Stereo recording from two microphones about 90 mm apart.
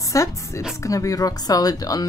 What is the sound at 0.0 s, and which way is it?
A woman's voice, 40° left (ahead or behind).